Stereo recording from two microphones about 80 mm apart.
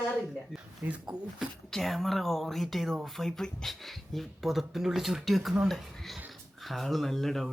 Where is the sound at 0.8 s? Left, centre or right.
Right.